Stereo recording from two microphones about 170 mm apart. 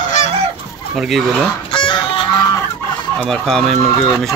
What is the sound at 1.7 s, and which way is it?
Chicken, 30° left (ahead or behind).